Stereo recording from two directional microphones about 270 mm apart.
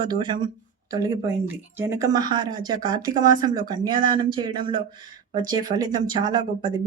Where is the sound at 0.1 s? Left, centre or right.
Centre.